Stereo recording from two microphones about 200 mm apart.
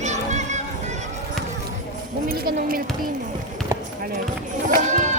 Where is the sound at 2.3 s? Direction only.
45° right (ahead or behind).